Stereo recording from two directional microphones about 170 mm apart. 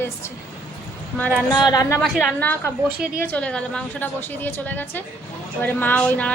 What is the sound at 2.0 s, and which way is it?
Speech, centre (ahead or behind).